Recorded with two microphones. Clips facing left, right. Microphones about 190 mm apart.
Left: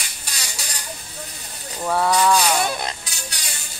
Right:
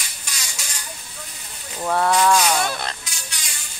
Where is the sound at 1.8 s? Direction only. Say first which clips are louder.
Even; centre (ahead or behind).